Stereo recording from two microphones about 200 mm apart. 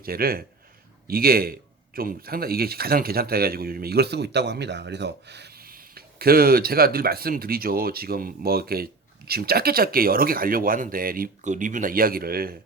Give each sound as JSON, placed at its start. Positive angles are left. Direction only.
{"t": 0.0, "sound": "speech", "side_deg": -50}